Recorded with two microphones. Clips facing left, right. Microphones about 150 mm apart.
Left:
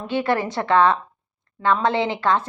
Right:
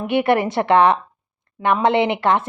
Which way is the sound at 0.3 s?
25° right (ahead or behind).